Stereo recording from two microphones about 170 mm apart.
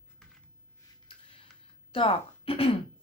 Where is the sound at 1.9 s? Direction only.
30° left (ahead or behind).